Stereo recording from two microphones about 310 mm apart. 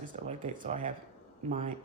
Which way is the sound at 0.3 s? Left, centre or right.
Right.